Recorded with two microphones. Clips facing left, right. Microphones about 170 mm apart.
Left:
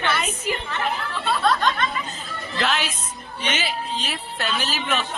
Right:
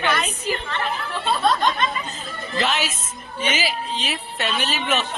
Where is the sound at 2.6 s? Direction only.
Centre (ahead or behind).